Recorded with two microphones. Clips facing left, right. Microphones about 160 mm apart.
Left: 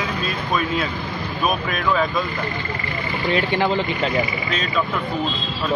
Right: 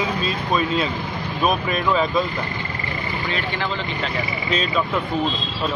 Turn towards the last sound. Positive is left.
turn(degrees=45)  # may be behind; listen again after turning